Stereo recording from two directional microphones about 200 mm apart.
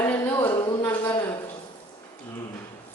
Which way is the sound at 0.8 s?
10° left (ahead or behind).